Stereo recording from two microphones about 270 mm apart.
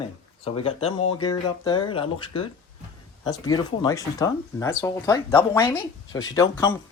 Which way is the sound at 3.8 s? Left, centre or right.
Centre.